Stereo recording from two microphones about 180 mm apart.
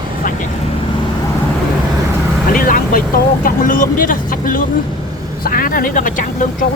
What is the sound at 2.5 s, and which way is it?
Speech, 50° left (ahead or behind).